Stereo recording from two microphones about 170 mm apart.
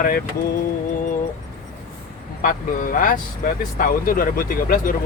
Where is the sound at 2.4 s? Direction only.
55° left (ahead or behind).